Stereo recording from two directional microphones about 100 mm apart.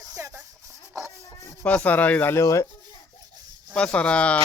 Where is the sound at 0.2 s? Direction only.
25° right (ahead or behind).